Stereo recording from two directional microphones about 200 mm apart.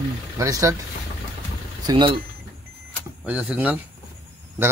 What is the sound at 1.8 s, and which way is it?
Speech, 25° right (ahead or behind).